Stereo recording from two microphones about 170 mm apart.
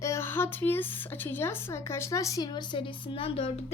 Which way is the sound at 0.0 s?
15° left (ahead or behind).